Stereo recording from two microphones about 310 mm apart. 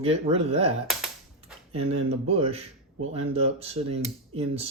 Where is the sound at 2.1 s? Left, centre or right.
Centre.